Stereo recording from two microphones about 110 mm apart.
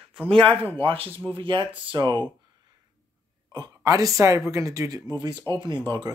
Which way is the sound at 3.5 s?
35° right (ahead or behind).